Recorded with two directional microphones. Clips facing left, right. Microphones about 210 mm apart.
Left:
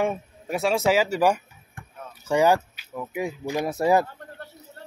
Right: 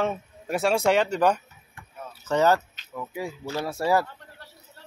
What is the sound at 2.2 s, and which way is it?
Speech, 10° left (ahead or behind).